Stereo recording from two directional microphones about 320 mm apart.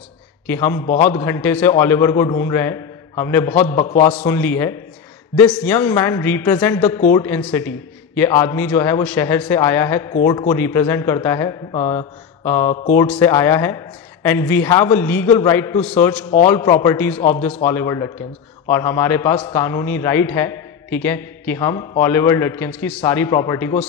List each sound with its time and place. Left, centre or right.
0.5 s a man's voice: centre
3.8 s a man's voice: left
4.1 s a man's voice: centre